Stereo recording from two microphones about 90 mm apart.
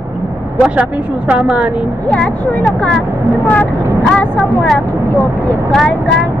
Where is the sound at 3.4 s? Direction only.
20° left (ahead or behind).